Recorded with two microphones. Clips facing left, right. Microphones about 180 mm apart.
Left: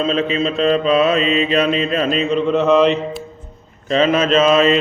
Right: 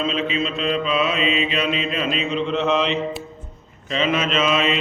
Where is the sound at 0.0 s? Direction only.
40° left (ahead or behind).